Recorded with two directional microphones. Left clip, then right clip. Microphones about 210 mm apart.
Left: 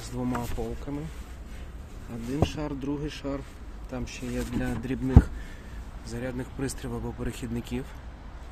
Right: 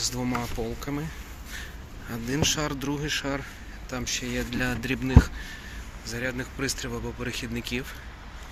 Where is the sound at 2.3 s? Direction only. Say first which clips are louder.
Right 4 dB; 5° right (ahead or behind).